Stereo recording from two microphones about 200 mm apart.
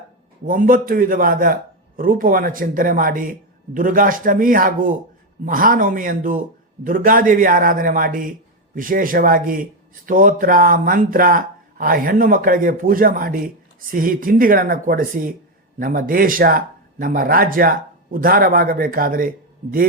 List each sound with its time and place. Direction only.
0.4 s a man's voice: 45° right (ahead or behind)